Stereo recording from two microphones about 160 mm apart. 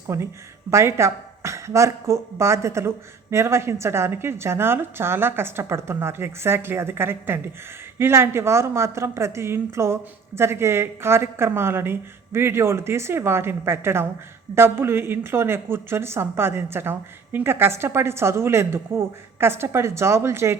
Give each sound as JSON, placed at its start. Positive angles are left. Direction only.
{"t": 0.1, "sound": "a woman's voice", "side_deg": -15}